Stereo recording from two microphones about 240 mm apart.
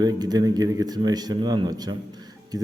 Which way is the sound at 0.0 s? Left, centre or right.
Centre.